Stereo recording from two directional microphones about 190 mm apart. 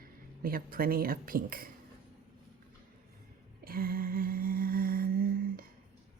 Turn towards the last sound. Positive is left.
turn(degrees=-50)  # may be behind; listen again after turning